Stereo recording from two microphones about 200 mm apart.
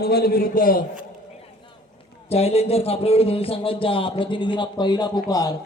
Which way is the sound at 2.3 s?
30° left (ahead or behind).